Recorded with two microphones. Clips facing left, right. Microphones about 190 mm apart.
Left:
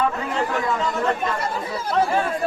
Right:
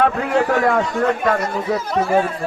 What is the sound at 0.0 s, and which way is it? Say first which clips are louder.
Speech: right 6 dB; 65° right (ahead or behind).